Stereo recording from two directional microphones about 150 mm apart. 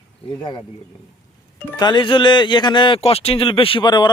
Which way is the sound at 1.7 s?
30° left (ahead or behind).